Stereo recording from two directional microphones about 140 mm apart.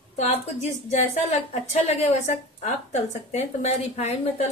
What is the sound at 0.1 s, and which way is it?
A woman's voice, 55° left (ahead or behind).